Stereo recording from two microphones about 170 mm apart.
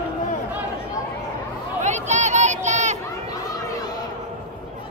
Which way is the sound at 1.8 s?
45° right (ahead or behind).